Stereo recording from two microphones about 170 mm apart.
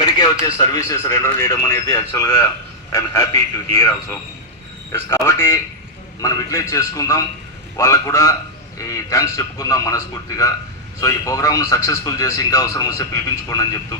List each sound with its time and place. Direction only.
0.0 s a man's voice: 25° left (ahead or behind)